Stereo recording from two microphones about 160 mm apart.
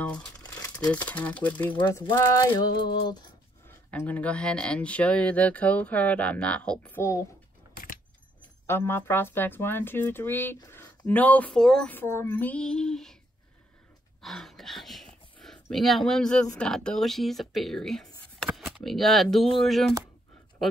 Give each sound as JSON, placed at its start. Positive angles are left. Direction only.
{"t": 0.4, "sound": "crumpling", "side_deg": 25}
{"t": 1.0, "sound": "speech", "side_deg": 10}
{"t": 1.8, "sound": "a sound", "side_deg": 20}
{"t": 3.6, "sound": "speech", "side_deg": 15}
{"t": 8.6, "sound": "speech", "side_deg": 15}
{"t": 14.2, "sound": "speech", "side_deg": 0}